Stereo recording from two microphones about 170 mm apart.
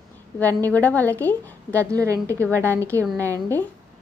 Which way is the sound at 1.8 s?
20° right (ahead or behind).